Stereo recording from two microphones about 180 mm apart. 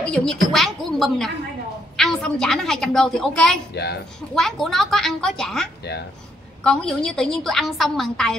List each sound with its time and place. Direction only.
0.0 s a woman's voice: 5° left (ahead or behind)
3.7 s a woman's voice: 65° left (ahead or behind)
4.4 s a woman's voice: centre (ahead or behind)